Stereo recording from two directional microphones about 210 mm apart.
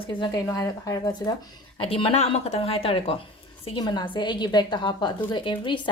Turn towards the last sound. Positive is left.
turn(degrees=20)  # may be behind; listen again after turning